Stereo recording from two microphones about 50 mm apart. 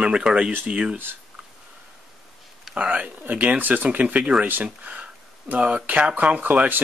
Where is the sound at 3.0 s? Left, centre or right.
Right.